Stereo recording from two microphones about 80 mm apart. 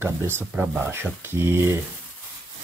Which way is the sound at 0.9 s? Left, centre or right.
Right.